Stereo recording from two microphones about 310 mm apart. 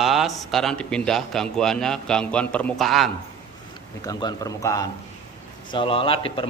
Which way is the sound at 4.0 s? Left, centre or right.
Centre.